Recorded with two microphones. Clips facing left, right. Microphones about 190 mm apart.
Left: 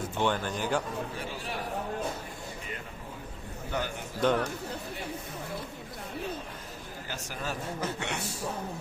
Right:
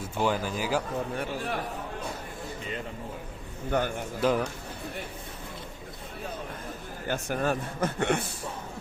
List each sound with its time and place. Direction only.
0.2 s speech: 5° right (ahead or behind)
1.1 s a man's voice: 55° right (ahead or behind)
3.7 s a man's voice: 55° right (ahead or behind)
4.2 s speech: 5° right (ahead or behind)
7.1 s a man's voice: 55° right (ahead or behind)